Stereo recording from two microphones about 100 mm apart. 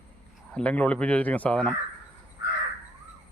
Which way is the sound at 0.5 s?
10° left (ahead or behind).